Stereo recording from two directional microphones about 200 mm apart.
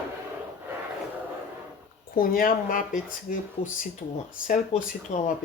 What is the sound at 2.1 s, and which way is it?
Speech, 45° left (ahead or behind).